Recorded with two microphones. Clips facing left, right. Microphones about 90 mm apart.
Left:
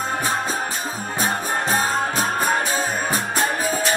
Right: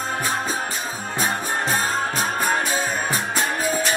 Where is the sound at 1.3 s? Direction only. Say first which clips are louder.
Left 3 dB; 40° left (ahead or behind).